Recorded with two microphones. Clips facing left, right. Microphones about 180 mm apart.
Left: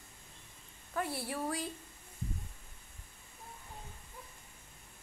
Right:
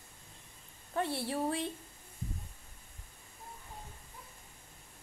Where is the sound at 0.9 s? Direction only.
30° right (ahead or behind).